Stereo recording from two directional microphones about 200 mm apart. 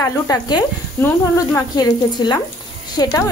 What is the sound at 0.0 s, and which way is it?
Speech, 20° left (ahead or behind).